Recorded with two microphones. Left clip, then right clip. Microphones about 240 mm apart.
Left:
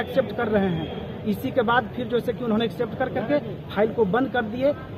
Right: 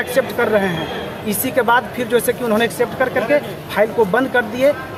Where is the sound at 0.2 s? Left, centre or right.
Centre.